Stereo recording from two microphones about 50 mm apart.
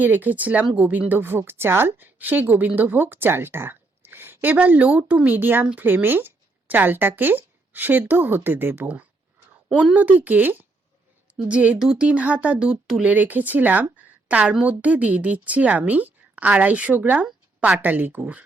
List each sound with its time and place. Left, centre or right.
0.0 s a woman's voice: right
4.5 s a woman's voice: right
5.4 s a woman's voice: right
9.9 s a woman's voice: right
11.4 s a woman's voice: right
13.1 s a woman's voice: right
13.9 s a sound: right
14.6 s a woman's voice: right